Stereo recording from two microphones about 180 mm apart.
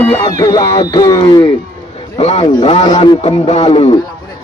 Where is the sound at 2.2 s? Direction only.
35° left (ahead or behind).